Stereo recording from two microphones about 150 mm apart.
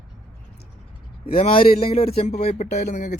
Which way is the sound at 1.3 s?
40° left (ahead or behind).